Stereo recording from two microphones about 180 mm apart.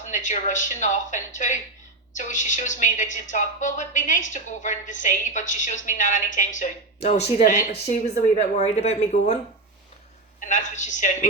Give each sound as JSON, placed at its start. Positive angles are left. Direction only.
{"t": 0.1, "sound": "speech", "side_deg": 45}
{"t": 10.4, "sound": "speech", "side_deg": 45}